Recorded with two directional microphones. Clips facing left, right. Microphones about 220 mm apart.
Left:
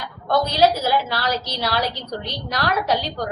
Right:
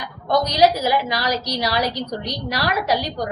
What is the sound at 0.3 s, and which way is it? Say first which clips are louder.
A woman's voice: right 1 dB; 15° right (ahead or behind).